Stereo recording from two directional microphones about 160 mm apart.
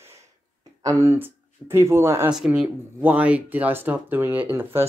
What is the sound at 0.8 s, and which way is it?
Speech, 20° right (ahead or behind).